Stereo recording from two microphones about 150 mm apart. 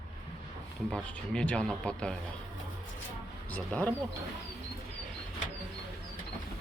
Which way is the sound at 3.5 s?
10° left (ahead or behind).